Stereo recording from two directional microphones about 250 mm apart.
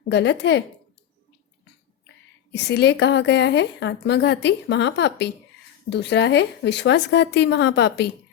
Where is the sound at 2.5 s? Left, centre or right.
Left.